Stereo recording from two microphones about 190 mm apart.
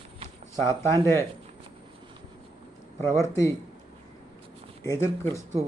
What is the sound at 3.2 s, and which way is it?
Speech, 15° left (ahead or behind).